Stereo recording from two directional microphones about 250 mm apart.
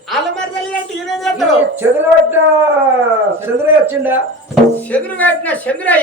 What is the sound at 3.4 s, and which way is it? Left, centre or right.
Speech, centre.